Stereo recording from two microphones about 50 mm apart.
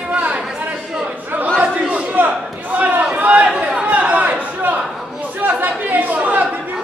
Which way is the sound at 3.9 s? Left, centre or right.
Right.